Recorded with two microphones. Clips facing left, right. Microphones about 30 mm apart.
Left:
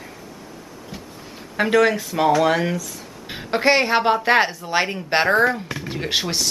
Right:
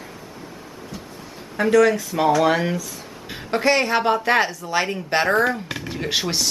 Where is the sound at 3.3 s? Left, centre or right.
Centre.